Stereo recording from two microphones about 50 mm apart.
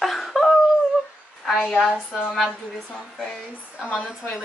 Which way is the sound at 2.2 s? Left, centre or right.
Centre.